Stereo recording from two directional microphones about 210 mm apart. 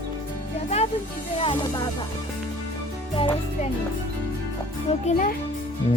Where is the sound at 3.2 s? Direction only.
25° left (ahead or behind).